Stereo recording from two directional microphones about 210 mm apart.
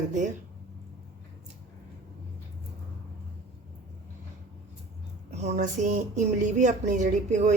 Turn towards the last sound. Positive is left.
turn(degrees=-35)  # may be behind; listen again after turning